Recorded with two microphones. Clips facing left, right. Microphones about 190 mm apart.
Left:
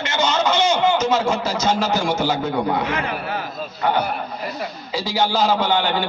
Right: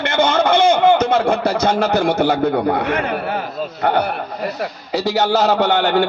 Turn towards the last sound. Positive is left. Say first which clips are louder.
# right 5 dB
turn(degrees=-65)  # may be behind; listen again after turning